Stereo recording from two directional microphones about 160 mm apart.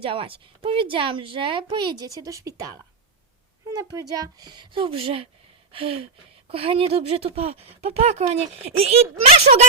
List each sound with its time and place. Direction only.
0.0 s speech: 35° right (ahead or behind)
4.2 s speech: 25° right (ahead or behind)